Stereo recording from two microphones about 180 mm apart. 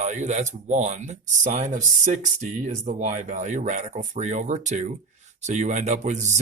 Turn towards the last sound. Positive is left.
turn(degrees=-40)  # may be behind; listen again after turning